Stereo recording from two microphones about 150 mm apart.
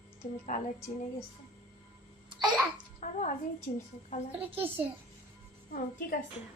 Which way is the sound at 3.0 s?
55° left (ahead or behind).